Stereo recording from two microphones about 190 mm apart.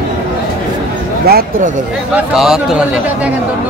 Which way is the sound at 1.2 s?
55° right (ahead or behind).